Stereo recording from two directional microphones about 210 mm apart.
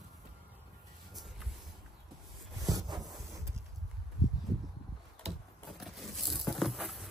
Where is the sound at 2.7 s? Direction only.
20° right (ahead or behind).